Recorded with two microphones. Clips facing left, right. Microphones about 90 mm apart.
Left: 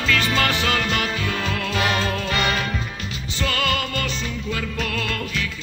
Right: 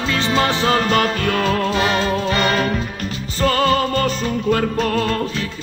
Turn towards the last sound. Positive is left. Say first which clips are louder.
# right 8 dB
turn(degrees=-35)  # may be behind; listen again after turning